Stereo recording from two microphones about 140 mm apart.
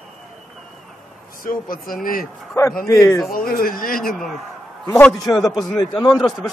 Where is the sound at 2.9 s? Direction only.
25° left (ahead or behind).